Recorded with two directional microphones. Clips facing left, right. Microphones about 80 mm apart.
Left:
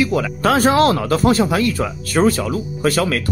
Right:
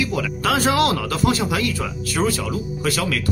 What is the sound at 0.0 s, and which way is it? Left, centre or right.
Speech, left.